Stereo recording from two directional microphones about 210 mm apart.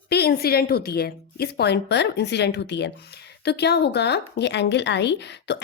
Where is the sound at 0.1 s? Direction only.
50° left (ahead or behind).